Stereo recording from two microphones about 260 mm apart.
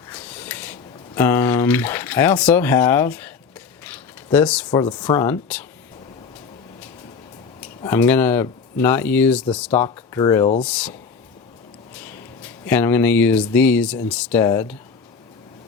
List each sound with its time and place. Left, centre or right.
0.1 s a sound: centre
4.8 s speech: centre
7.9 s speech: centre
10.6 s speech: centre
12.6 s speech: centre